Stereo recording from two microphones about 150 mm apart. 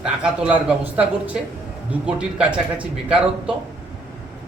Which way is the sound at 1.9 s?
5° right (ahead or behind).